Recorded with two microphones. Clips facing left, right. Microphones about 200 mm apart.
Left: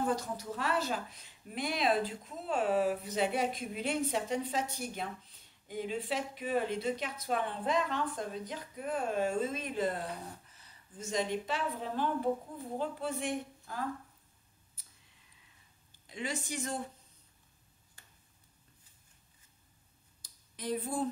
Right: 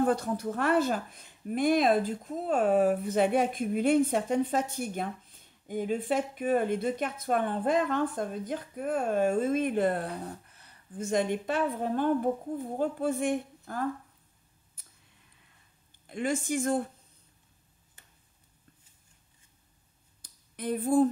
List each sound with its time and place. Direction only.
0.0 s speech: 55° right (ahead or behind)
16.1 s speech: 50° right (ahead or behind)
20.2 s a sound: 55° right (ahead or behind)